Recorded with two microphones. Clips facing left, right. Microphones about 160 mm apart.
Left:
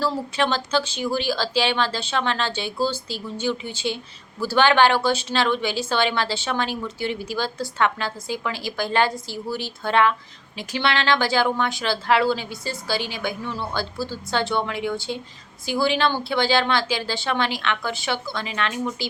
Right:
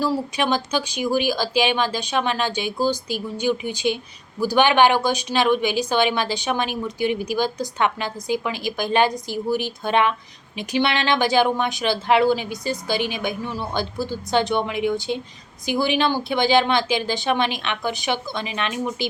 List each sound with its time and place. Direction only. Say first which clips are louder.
0.0 s speech: right 1 dB; 15° right (ahead or behind)